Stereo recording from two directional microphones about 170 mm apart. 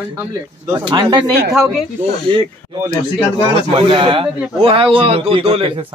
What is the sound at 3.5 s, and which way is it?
Speech, 30° right (ahead or behind).